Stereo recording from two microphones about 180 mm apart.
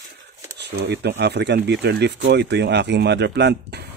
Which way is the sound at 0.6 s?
65° right (ahead or behind).